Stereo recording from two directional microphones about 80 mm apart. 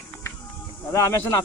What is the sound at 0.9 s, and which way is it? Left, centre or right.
Speech, left.